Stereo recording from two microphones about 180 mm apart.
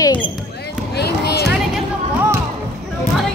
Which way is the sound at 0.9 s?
65° left (ahead or behind).